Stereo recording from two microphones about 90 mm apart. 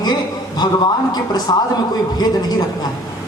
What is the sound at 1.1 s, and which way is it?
Speech, 50° left (ahead or behind).